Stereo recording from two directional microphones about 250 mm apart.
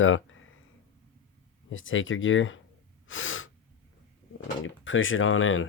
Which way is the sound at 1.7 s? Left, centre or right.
Left.